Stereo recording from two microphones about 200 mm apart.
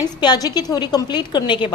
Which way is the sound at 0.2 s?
20° left (ahead or behind).